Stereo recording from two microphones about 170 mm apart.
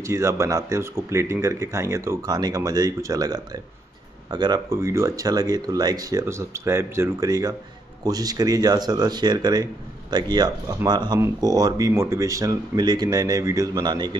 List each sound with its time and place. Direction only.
0.0 s speech: 15° right (ahead or behind)